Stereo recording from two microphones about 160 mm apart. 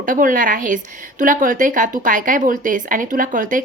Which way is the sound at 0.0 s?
60° right (ahead or behind).